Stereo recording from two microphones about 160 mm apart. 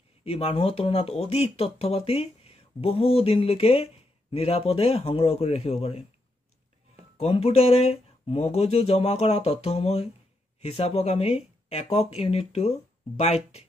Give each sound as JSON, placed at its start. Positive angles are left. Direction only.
{"t": 0.2, "sound": "speech", "side_deg": 35}
{"t": 7.2, "sound": "speech", "side_deg": 40}